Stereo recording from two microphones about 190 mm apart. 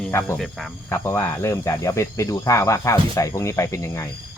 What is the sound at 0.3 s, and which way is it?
Speech, centre (ahead or behind).